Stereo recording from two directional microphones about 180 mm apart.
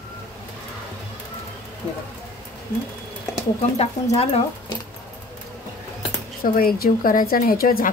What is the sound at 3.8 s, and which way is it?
Speech, 35° left (ahead or behind).